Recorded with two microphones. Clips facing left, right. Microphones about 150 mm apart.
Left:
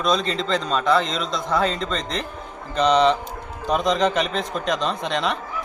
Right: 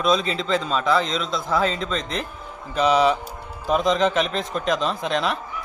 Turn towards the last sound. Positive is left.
turn(degrees=0)  # may be behind; listen again after turning